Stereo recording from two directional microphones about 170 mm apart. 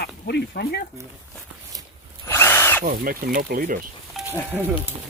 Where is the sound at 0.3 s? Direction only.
70° left (ahead or behind).